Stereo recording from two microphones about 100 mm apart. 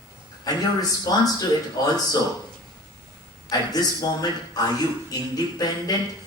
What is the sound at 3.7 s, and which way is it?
Speech, 40° left (ahead or behind).